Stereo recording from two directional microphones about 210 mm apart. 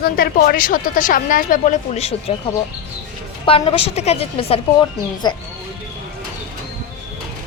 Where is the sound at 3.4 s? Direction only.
25° left (ahead or behind).